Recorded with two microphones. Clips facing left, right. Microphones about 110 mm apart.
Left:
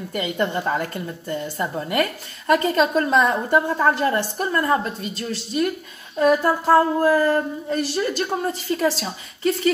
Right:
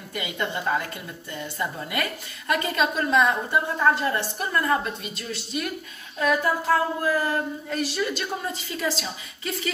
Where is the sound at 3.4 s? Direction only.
55° left (ahead or behind).